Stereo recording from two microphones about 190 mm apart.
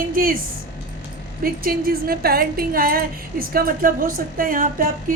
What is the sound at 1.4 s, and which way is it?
A woman's voice, 50° right (ahead or behind).